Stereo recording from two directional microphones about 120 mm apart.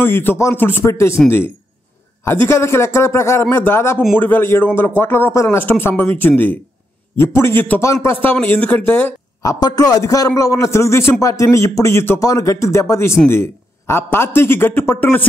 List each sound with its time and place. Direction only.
0.0 s a man's voice: 20° left (ahead or behind)
2.2 s a man's voice: 20° left (ahead or behind)
9.4 s a man's voice: 30° left (ahead or behind)